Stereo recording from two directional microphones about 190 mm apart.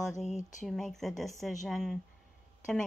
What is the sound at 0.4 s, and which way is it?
Speech, 40° left (ahead or behind).